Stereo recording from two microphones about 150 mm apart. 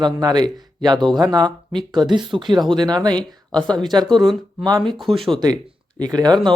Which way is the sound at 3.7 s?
30° right (ahead or behind).